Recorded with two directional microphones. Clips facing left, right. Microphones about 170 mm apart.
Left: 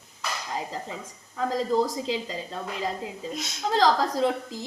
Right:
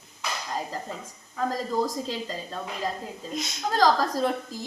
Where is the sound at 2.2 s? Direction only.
10° left (ahead or behind).